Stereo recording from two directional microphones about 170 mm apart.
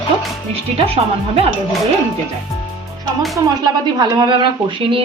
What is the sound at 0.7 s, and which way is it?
Speech, 35° right (ahead or behind).